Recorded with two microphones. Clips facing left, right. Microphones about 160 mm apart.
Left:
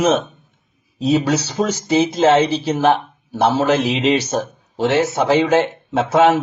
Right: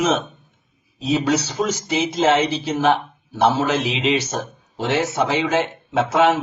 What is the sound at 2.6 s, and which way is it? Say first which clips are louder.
A man's voice: left 3 dB; 45° left (ahead or behind).